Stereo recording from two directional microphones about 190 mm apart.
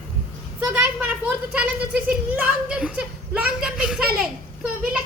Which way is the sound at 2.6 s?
5° right (ahead or behind).